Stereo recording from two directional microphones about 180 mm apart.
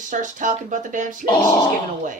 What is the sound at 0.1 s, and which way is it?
Speech, 45° right (ahead or behind).